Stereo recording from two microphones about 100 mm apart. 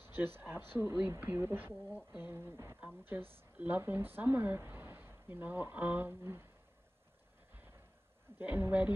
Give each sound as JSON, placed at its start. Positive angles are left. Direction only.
{"t": 0.0, "sound": "speech", "side_deg": -20}
{"t": 8.4, "sound": "speech", "side_deg": -20}